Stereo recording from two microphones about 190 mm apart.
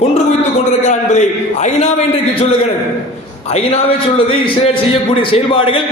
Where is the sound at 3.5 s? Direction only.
30° left (ahead or behind).